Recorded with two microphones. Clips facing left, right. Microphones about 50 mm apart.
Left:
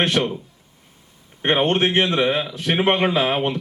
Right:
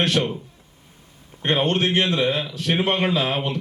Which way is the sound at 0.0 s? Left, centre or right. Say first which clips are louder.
Left 1 dB; left.